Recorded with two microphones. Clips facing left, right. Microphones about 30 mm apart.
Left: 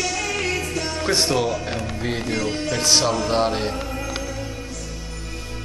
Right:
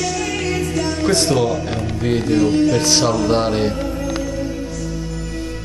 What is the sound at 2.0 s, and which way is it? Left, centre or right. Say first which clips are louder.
Speech: right 11 dB; centre.